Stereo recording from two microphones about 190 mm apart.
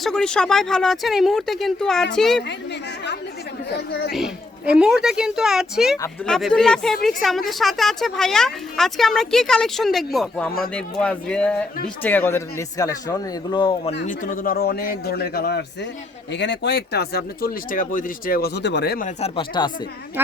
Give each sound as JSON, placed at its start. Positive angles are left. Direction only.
{"t": 0.0, "sound": "speech", "side_deg": 5}
{"t": 3.8, "sound": "speech", "side_deg": 60}
{"t": 4.1, "sound": "speech", "side_deg": -5}
{"t": 14.1, "sound": "a man's voice", "side_deg": 45}
{"t": 19.0, "sound": "speech", "side_deg": 30}
{"t": 20.2, "sound": "speech", "side_deg": -10}